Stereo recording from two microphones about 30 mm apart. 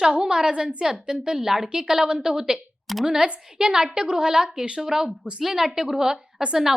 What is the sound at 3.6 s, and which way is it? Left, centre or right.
A woman's voice, right.